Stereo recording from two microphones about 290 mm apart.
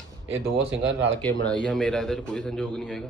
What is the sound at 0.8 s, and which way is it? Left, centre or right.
Speech, right.